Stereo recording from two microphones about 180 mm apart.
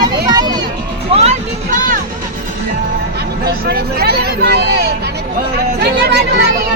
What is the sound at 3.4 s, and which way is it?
Speech, 60° right (ahead or behind).